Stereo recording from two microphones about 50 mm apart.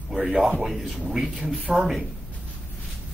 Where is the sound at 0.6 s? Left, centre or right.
Centre.